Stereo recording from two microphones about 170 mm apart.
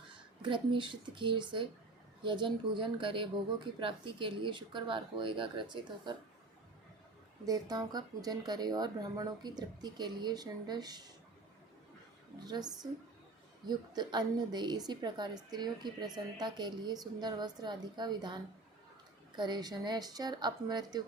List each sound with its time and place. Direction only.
0.4 s a woman's voice: 30° right (ahead or behind)
7.4 s a woman's voice: 20° right (ahead or behind)
12.5 s a woman's voice: 25° right (ahead or behind)
19.4 s a woman's voice: 25° right (ahead or behind)